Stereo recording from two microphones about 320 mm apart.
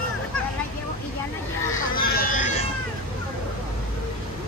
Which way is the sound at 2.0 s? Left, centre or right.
Left.